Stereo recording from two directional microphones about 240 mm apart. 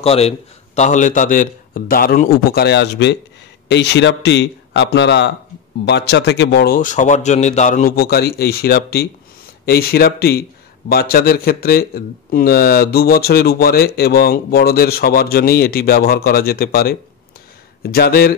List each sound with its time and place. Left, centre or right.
0.0 s a man's voice: left